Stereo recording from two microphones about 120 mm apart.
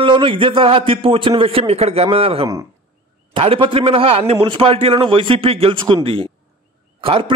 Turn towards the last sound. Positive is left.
turn(degrees=-50)  # may be behind; listen again after turning